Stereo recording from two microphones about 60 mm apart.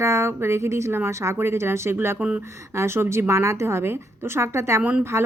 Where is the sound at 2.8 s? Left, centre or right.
Right.